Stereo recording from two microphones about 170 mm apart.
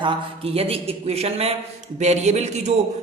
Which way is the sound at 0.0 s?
35° right (ahead or behind).